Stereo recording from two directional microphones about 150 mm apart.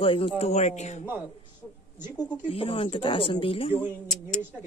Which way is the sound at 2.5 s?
40° left (ahead or behind).